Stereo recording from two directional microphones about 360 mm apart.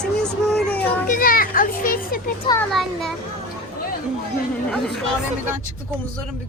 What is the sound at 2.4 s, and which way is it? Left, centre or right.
Speech, centre.